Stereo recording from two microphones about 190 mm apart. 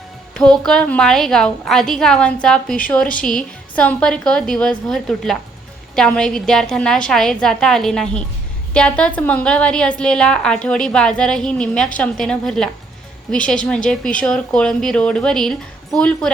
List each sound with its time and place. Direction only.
0.3 s speech: 5° left (ahead or behind)